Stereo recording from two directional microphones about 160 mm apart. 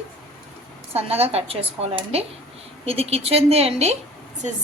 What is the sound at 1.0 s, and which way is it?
Speech, 40° right (ahead or behind).